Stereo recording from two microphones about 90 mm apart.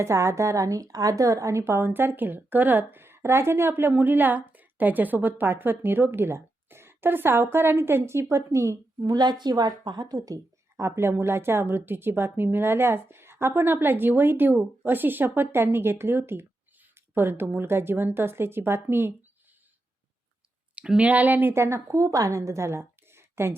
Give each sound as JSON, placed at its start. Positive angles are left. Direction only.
{"t": 0.0, "sound": "a woman's voice", "side_deg": -35}
{"t": 9.1, "sound": "a woman's voice", "side_deg": -50}
{"t": 20.7, "sound": "speech", "side_deg": -10}